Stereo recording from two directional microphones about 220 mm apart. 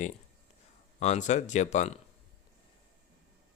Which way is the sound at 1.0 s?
30° left (ahead or behind).